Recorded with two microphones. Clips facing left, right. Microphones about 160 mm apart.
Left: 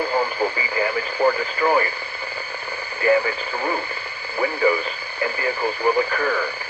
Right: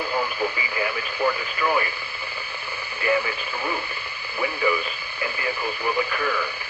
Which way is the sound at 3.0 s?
35° left (ahead or behind).